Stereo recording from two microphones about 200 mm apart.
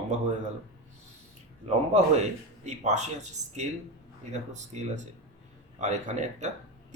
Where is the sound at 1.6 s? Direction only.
35° right (ahead or behind).